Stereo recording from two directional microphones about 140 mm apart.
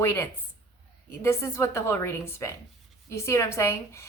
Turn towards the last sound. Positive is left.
turn(degrees=20)  # may be behind; listen again after turning